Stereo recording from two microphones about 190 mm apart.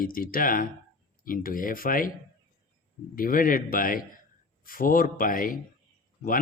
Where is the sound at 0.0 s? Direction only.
50° left (ahead or behind).